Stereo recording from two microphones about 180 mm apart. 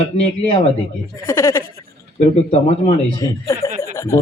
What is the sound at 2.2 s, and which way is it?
A man's voice, 35° left (ahead or behind).